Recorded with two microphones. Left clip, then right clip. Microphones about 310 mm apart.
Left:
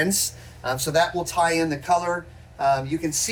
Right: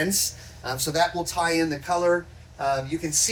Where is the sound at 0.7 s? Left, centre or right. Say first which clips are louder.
Left 4 dB; left.